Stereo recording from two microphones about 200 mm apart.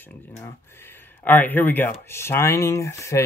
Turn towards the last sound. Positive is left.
turn(degrees=15)  # may be behind; listen again after turning